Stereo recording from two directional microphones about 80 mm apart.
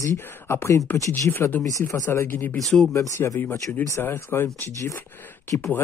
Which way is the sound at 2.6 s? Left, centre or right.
Centre.